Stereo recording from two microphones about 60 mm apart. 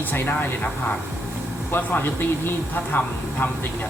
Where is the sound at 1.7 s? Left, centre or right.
Left.